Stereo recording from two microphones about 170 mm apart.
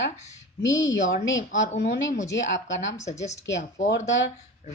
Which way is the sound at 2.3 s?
90° left.